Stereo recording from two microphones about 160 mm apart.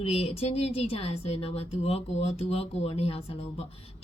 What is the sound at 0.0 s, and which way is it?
Speech, 40° left (ahead or behind).